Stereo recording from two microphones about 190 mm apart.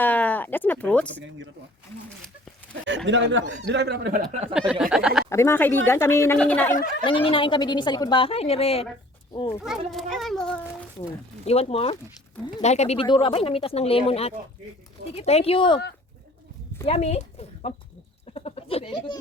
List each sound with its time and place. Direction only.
0.0 s speech: 10° left (ahead or behind)
3.1 s speech: 75° right (ahead or behind); by 4.3 s 55° right (ahead or behind)
4.5 s a child's voice: 5° right (ahead or behind)
5.3 s speech: 15° left (ahead or behind)
7.0 s speech: 25° left (ahead or behind)
9.6 s a child's voice: centre (ahead or behind)
11.4 s speech: 30° left (ahead or behind)
16.8 s speech: 30° left (ahead or behind)